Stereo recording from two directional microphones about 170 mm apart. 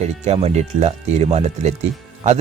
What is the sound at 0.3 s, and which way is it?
Speech, 40° right (ahead or behind).